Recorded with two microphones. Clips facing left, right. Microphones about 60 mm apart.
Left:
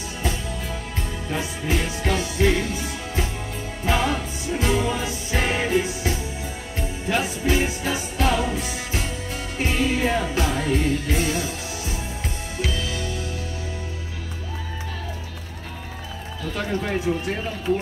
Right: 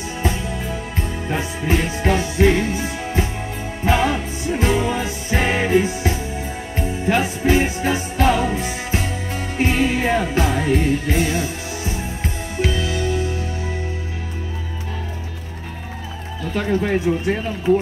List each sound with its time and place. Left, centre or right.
0.2 s music: right
16.8 s speech: right